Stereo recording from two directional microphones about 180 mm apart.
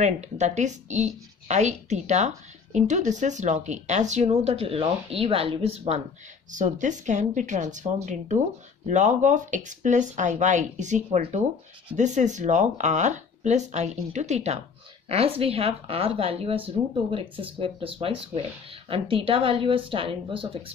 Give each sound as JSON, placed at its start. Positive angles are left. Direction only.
{"t": 0.0, "sound": "a woman's voice", "side_deg": -40}